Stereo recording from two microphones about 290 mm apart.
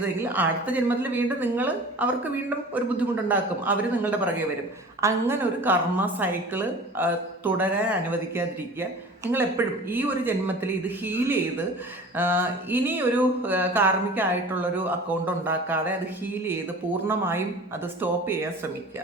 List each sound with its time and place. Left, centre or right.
0.3 s a woman's voice: centre